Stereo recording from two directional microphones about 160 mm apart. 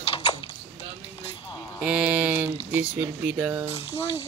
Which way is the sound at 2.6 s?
10° right (ahead or behind).